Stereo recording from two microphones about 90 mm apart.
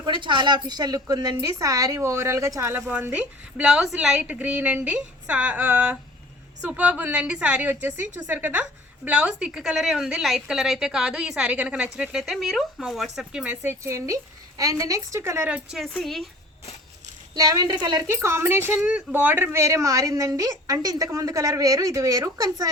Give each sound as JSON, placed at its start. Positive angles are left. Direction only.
{"t": 0.0, "sound": "a woman's voice", "side_deg": -65}
{"t": 3.6, "sound": "a woman's voice", "side_deg": -5}
{"t": 13.4, "sound": "a woman's voice", "side_deg": -20}
{"t": 15.4, "sound": "a woman's voice", "side_deg": -10}
{"t": 15.8, "sound": "a woman's voice", "side_deg": 5}
{"t": 17.3, "sound": "a woman's voice", "side_deg": -45}
{"t": 18.1, "sound": "speech", "side_deg": -30}
{"t": 18.7, "sound": "a woman's voice", "side_deg": -5}
{"t": 18.9, "sound": "a woman's voice", "side_deg": -20}